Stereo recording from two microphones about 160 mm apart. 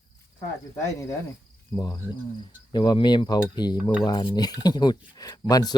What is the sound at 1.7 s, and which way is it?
Speech, 25° left (ahead or behind).